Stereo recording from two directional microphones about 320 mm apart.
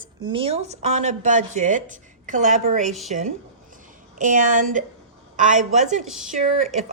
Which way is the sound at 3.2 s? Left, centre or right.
Right.